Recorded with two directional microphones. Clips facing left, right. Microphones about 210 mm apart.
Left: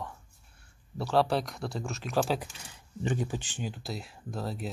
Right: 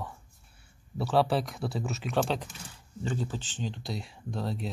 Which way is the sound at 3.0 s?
15° left (ahead or behind).